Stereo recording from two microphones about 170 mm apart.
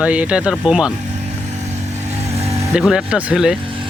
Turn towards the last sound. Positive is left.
turn(degrees=-5)  # may be behind; listen again after turning